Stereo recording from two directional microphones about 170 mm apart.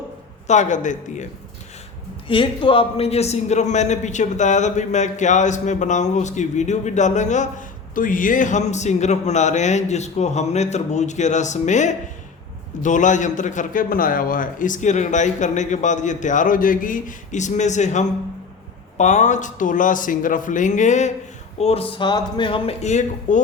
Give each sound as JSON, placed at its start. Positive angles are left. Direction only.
{"t": 0.4, "sound": "a man's voice", "side_deg": 45}
{"t": 2.2, "sound": "a man's voice", "side_deg": 30}